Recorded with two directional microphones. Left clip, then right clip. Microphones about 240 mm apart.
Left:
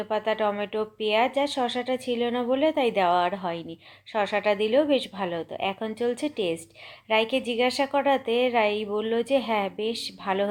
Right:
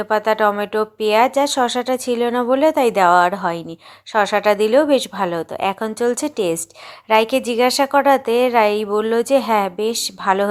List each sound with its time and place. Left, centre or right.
0.0 s speech: right